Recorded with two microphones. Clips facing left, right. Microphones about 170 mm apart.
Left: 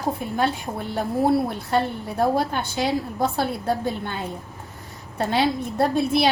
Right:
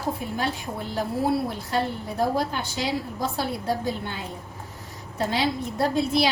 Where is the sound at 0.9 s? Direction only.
60° left (ahead or behind).